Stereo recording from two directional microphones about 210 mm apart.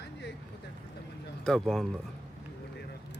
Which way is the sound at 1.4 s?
Centre (ahead or behind).